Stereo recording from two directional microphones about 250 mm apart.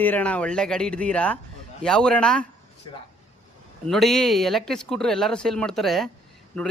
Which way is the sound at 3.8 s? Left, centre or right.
Centre.